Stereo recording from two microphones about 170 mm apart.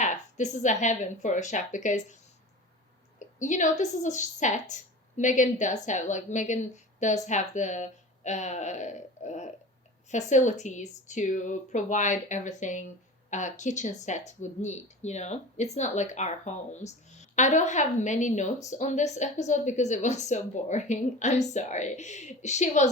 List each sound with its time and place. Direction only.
0.0 s speech: 45° left (ahead or behind)
3.2 s speech: 45° left (ahead or behind)